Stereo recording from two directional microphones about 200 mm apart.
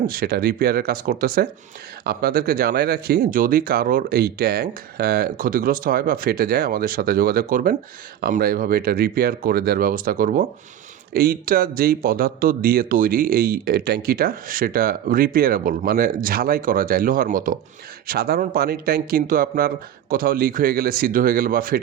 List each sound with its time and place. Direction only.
0.1 s speech: 50° right (ahead or behind)